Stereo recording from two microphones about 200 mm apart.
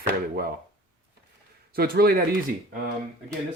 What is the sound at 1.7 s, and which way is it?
Speech, 50° right (ahead or behind).